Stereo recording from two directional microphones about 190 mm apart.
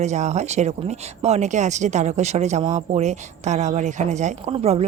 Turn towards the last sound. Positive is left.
turn(degrees=-35)  # may be behind; listen again after turning